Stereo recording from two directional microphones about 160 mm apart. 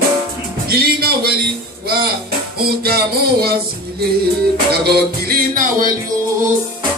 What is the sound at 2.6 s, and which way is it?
Music, 75° right (ahead or behind).